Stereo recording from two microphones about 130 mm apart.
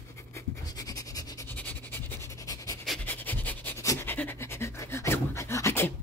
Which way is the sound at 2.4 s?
25° left (ahead or behind).